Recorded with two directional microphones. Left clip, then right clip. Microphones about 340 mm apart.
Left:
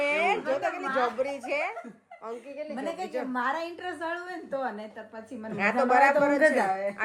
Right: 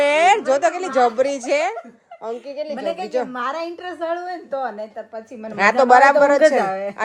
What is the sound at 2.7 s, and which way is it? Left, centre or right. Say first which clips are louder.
A woman's voice: right 10 dB; right.